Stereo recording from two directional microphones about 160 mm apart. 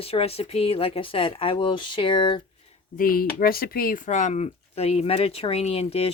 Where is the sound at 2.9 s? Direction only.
65° left (ahead or behind); by 6.1 s 40° left (ahead or behind).